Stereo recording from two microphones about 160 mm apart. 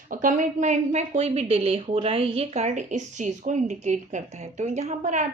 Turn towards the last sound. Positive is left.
turn(degrees=-50)  # may be behind; listen again after turning